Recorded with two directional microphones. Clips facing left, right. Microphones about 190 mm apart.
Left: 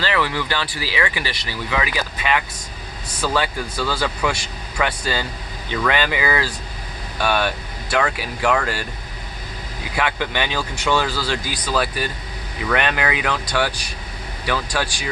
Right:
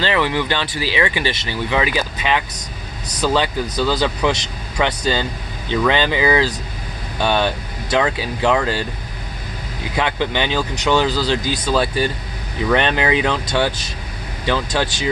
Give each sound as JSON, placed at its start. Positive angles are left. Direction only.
{"t": 0.0, "sound": "speech", "side_deg": -20}
{"t": 9.9, "sound": "speech", "side_deg": -20}